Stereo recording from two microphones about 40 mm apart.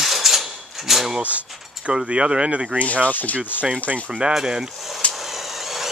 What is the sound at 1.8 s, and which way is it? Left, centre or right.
Speech, right.